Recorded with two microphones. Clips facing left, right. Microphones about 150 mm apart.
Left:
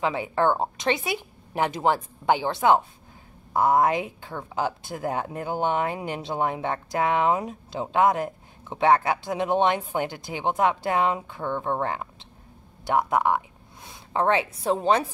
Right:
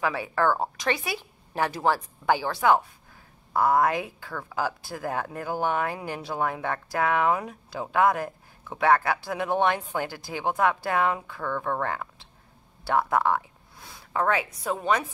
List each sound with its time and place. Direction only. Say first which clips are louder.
0.0 s speech: left 2 dB; 20° left (ahead or behind)